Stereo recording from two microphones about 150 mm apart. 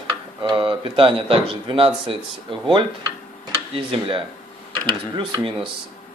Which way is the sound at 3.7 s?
35° right (ahead or behind).